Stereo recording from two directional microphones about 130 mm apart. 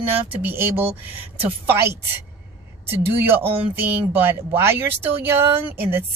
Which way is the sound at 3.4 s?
45° right (ahead or behind).